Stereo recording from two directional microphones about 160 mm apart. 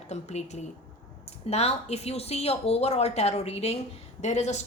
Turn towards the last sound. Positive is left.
turn(degrees=45)  # may be behind; listen again after turning